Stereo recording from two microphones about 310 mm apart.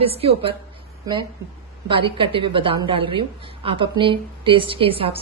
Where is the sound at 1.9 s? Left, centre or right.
Centre.